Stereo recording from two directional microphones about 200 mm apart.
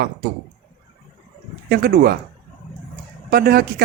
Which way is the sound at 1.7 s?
50° right (ahead or behind).